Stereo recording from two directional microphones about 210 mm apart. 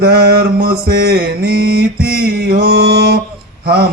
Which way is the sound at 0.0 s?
50° right (ahead or behind).